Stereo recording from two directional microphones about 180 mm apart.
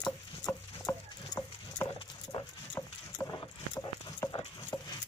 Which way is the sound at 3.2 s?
20° left (ahead or behind).